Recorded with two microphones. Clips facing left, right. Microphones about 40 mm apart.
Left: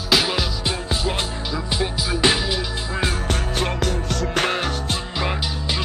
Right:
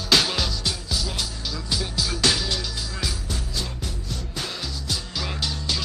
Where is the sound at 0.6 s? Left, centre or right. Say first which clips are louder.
Left 5 dB; left.